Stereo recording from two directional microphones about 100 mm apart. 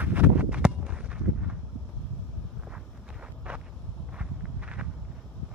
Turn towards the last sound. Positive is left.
turn(degrees=-10)  # may be behind; listen again after turning